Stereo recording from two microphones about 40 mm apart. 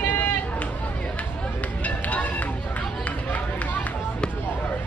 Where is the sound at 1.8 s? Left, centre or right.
Left.